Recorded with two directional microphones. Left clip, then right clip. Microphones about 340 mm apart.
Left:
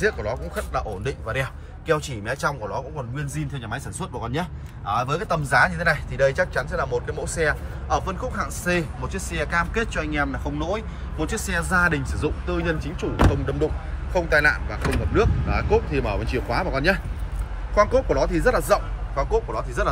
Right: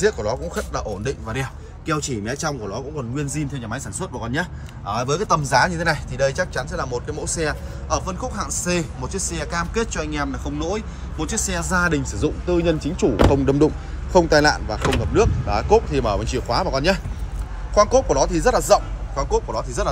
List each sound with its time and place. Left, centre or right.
0.0 s a man's voice: centre
14.1 s speech: right
14.5 s a man's voice: centre